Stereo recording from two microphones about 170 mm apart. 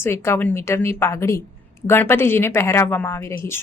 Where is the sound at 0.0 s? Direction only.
15° left (ahead or behind).